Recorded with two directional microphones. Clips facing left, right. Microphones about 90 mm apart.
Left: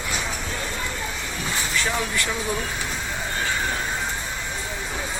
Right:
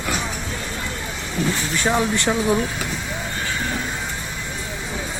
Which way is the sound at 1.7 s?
25° right (ahead or behind).